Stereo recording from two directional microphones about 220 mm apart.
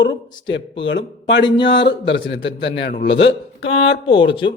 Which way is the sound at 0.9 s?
55° left (ahead or behind).